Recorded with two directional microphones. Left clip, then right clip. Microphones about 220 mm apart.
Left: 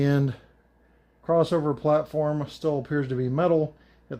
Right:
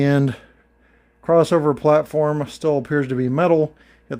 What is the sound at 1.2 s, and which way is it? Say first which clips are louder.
Speech: right 7 dB; 50° right (ahead or behind).